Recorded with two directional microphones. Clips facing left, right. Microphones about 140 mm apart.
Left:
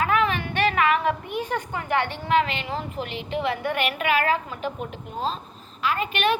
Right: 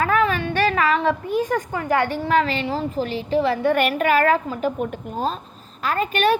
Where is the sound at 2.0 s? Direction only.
40° right (ahead or behind).